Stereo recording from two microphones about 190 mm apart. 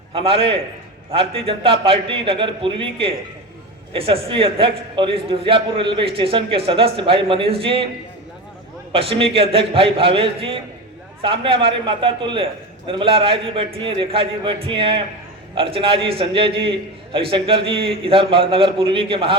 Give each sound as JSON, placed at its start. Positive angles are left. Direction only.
{"t": 0.1, "sound": "a man's voice", "side_deg": -30}
{"t": 8.9, "sound": "a man's voice", "side_deg": -30}